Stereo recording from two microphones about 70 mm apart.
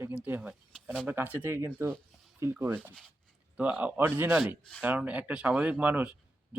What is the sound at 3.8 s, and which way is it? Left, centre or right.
Speech, right.